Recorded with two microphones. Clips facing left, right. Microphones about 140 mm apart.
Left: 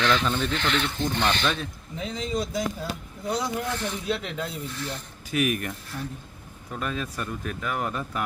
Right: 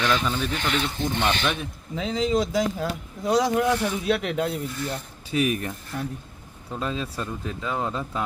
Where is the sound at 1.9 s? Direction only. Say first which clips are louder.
Right 7 dB; 90° right; by 4.5 s 60° right (ahead or behind).